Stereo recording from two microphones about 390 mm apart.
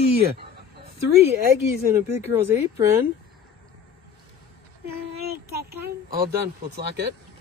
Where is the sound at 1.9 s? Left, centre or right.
Centre.